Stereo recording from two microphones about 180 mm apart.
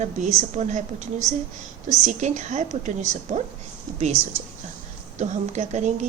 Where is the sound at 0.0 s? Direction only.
40° right (ahead or behind).